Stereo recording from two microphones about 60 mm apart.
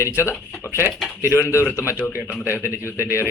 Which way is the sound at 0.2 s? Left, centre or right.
Left.